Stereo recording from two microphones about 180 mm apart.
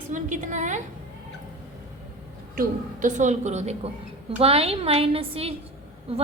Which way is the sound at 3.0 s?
45° right (ahead or behind).